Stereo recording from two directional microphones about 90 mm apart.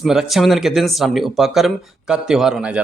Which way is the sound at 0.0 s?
5° right (ahead or behind).